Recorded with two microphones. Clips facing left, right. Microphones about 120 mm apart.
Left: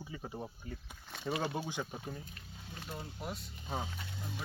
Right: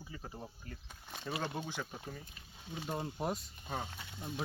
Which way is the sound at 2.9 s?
35° right (ahead or behind).